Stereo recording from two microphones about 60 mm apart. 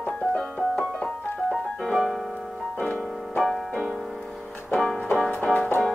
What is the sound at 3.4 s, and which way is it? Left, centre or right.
Music, centre.